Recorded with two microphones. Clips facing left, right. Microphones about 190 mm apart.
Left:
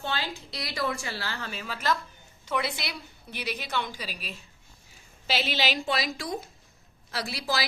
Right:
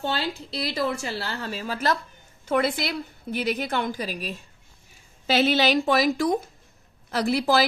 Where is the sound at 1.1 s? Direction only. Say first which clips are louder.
Right 5 dB; 35° right (ahead or behind).